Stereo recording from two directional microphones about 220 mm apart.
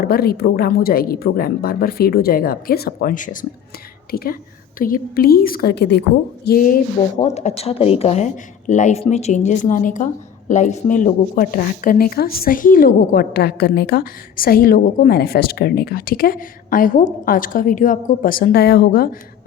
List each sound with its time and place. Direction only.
0.0 s a woman's voice: 45° left (ahead or behind)
7.2 s speech: 30° left (ahead or behind)